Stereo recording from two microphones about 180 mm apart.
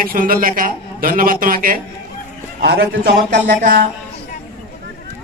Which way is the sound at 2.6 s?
80° right.